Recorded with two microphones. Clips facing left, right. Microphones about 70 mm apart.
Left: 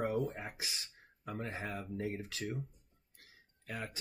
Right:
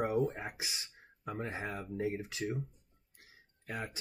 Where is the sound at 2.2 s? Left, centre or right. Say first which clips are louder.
Right 3 dB; centre.